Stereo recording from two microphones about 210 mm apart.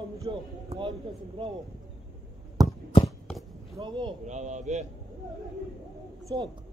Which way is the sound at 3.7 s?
25° right (ahead or behind).